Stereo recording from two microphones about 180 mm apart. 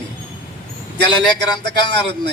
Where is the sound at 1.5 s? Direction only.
25° left (ahead or behind).